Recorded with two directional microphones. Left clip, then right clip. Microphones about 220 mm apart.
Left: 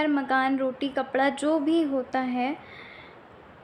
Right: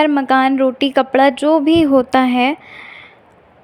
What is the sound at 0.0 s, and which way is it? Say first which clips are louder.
A woman's voice: right 11 dB; 40° right (ahead or behind).